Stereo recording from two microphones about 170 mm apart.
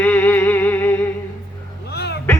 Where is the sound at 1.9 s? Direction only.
75° left (ahead or behind).